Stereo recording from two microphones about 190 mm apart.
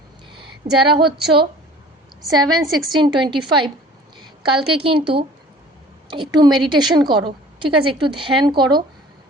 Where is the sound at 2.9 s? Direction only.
25° right (ahead or behind).